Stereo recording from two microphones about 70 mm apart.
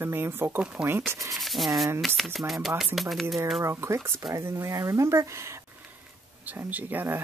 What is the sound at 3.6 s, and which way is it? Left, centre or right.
Speech, right.